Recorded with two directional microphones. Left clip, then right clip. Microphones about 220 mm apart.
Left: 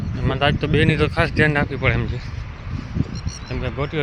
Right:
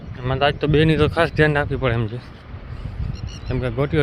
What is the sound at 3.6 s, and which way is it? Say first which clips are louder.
Speech: right 4 dB; 40° right (ahead or behind).